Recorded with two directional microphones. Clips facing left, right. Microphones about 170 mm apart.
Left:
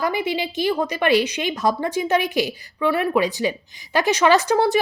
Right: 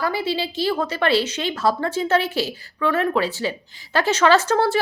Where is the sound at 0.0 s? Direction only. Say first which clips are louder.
Left 1 dB; 20° left (ahead or behind).